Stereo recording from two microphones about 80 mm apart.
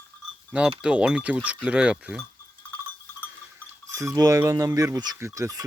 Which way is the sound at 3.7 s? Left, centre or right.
Right.